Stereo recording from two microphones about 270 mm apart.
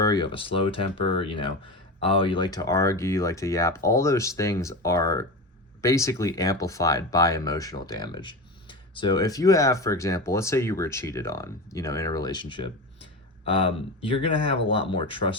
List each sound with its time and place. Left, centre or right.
0.0 s speech: centre
14.2 s speech: centre